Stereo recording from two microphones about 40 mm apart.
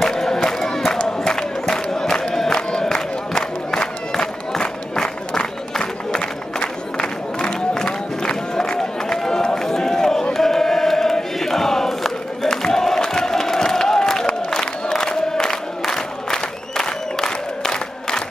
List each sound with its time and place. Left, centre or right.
0.0 s crowd: centre
10.3 s chant: centre
12.6 s crowd: centre